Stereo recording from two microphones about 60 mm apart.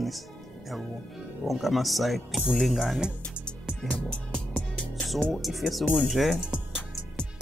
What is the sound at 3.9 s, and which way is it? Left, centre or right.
Music, left.